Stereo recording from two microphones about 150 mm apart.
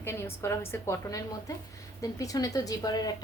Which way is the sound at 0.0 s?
15° left (ahead or behind).